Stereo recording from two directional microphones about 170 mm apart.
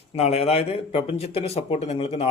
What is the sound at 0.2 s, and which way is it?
Speech, 40° left (ahead or behind).